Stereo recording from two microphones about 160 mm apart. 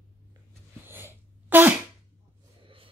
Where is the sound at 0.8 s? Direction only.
15° right (ahead or behind).